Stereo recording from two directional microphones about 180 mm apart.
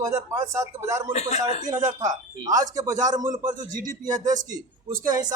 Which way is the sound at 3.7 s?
45° right (ahead or behind).